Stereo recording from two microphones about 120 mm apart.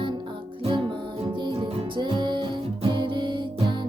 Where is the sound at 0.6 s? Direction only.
50° right (ahead or behind).